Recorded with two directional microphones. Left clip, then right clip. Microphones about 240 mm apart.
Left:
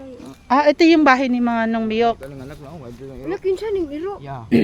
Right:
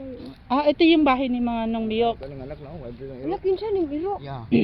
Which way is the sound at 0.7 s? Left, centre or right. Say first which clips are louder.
Left 5 dB; left.